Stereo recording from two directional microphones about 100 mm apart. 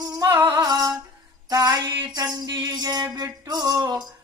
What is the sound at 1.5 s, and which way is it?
Music, 40° right (ahead or behind).